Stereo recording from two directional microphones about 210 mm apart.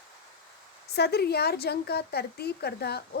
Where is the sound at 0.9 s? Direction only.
50° left (ahead or behind).